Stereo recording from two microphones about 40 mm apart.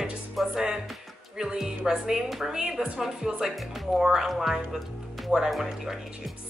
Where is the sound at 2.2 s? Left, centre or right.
Centre.